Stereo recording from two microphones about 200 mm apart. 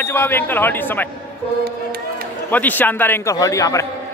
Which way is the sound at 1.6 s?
50° right (ahead or behind).